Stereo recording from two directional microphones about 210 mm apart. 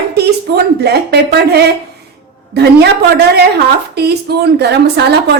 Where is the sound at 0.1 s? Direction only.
50° right (ahead or behind).